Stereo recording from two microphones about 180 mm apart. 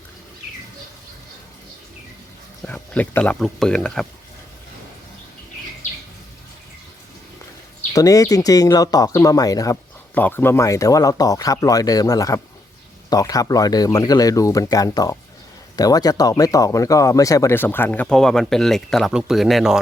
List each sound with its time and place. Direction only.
2.6 s speech: 10° left (ahead or behind)
7.9 s speech: 20° left (ahead or behind); by 19.8 s centre (ahead or behind)